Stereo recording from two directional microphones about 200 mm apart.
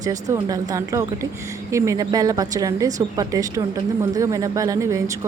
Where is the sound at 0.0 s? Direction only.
15° right (ahead or behind).